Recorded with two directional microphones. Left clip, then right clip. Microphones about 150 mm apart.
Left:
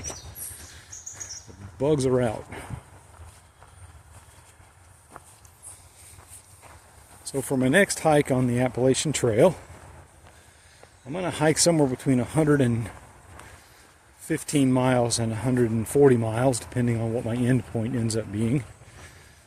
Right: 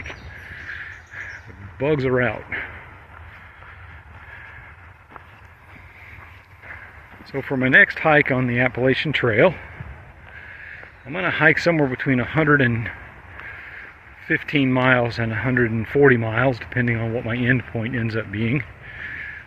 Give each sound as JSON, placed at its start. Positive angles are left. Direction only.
{"t": 1.8, "sound": "speech", "side_deg": 30}
{"t": 7.6, "sound": "speech", "side_deg": 30}
{"t": 11.1, "sound": "speech", "side_deg": 30}
{"t": 14.3, "sound": "speech", "side_deg": 30}